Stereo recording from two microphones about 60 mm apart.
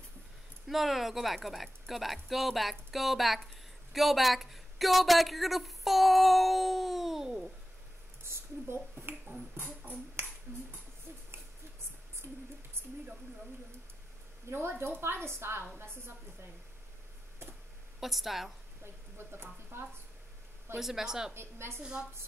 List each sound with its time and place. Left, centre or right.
0.7 s speech: centre
8.2 s a sound: right
11.1 s owl: right
14.5 s a woman's voice: right
18.0 s speech: centre
19.1 s a sound: right
20.8 s a woman's voice: centre
21.3 s a woman's voice: right